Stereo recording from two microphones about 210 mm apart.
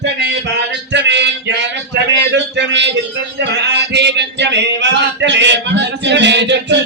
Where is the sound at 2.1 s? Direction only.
55° right (ahead or behind).